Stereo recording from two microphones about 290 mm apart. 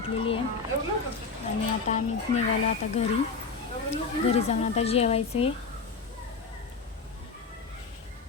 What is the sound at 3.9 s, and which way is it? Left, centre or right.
Speech, left.